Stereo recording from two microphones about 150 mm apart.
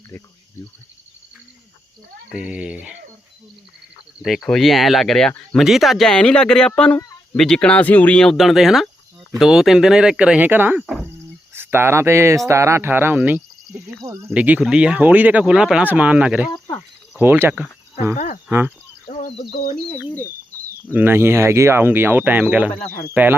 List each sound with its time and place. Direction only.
2.3 s speech: 5° right (ahead or behind)
4.2 s speech: centre (ahead or behind); by 14.3 s 20° right (ahead or behind)
14.3 s speech: 10° right (ahead or behind)
19.2 s a sound: 60° left (ahead or behind)
19.9 s speech: 15° left (ahead or behind)
20.9 s speech: 15° right (ahead or behind)
22.9 s speech: 80° left